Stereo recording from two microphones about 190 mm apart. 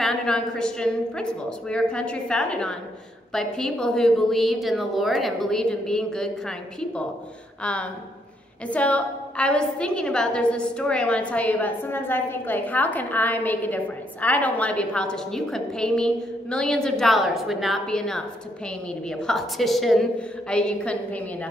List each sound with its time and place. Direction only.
0.0 s a woman's voice: 5° left (ahead or behind)